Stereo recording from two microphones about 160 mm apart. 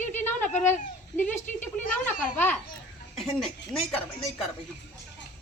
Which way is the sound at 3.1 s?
Centre (ahead or behind).